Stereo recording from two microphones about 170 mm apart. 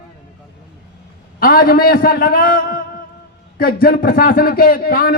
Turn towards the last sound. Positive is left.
turn(degrees=60)  # may be behind; listen again after turning